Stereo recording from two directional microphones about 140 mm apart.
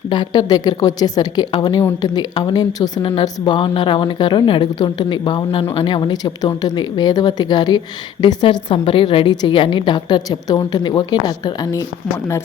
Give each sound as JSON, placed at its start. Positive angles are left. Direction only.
{"t": 0.1, "sound": "a woman's voice", "side_deg": 30}